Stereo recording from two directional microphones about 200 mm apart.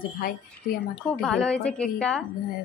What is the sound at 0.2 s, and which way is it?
Speech, 45° left (ahead or behind).